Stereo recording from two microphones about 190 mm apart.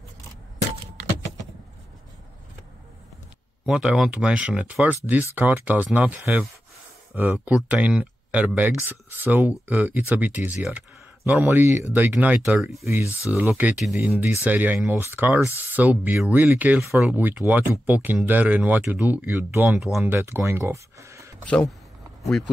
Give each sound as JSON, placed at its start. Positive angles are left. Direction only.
{"t": 3.6, "sound": "speech", "side_deg": -5}
{"t": 19.8, "sound": "speech", "side_deg": 0}
{"t": 20.2, "sound": "speech", "side_deg": -15}
{"t": 21.5, "sound": "speech", "side_deg": 5}